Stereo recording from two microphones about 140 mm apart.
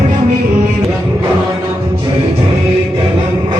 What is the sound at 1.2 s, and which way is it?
Music, 25° right (ahead or behind).